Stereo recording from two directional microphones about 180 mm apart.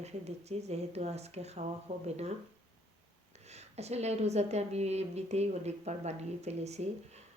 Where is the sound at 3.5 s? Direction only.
35° right (ahead or behind).